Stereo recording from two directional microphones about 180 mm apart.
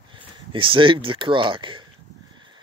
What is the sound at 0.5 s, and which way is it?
Speech, 30° right (ahead or behind).